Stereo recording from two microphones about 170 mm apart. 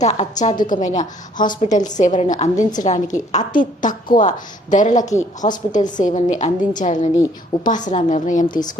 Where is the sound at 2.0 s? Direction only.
45° left (ahead or behind).